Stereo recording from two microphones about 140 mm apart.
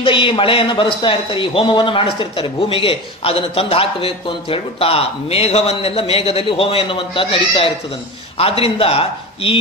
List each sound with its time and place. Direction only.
0.0 s a man's voice: 40° left (ahead or behind)